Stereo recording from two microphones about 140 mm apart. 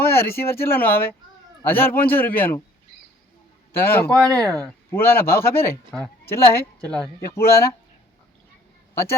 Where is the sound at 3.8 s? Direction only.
15° left (ahead or behind).